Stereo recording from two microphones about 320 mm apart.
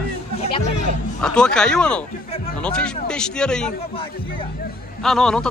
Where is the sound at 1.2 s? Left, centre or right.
Centre.